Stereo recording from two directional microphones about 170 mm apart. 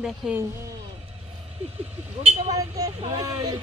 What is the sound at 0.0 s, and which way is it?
Speech, 5° right (ahead or behind).